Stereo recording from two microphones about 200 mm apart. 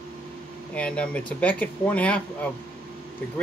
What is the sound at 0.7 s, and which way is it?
Speech, 5° left (ahead or behind).